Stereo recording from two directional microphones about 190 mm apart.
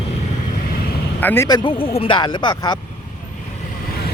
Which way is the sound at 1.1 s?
10° left (ahead or behind).